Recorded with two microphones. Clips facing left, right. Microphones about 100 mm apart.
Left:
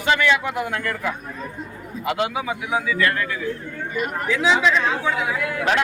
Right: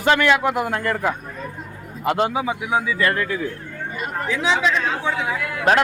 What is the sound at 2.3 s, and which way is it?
Speech, 25° right (ahead or behind).